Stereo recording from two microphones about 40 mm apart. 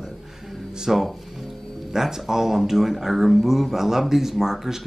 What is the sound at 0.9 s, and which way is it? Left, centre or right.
Speech, centre.